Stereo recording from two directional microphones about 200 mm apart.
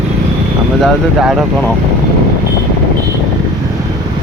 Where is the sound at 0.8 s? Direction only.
Centre (ahead or behind).